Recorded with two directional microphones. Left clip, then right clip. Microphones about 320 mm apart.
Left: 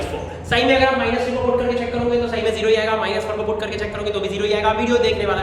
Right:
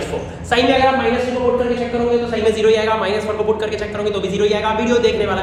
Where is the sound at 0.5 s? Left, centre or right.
Centre.